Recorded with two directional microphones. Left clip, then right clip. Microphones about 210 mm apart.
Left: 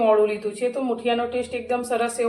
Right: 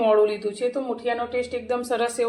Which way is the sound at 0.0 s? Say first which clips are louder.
Left 1 dB; 40° right (ahead or behind).